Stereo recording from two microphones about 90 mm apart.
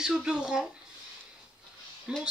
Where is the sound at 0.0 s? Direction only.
10° right (ahead or behind).